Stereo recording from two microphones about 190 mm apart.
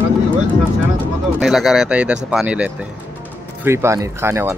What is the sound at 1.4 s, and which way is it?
Speech, centre (ahead or behind).